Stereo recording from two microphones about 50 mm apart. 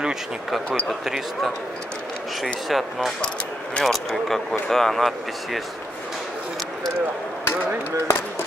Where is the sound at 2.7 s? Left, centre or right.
Centre.